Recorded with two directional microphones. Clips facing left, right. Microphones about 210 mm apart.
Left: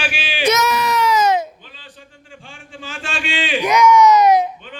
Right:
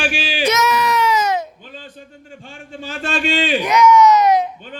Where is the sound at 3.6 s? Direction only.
10° left (ahead or behind).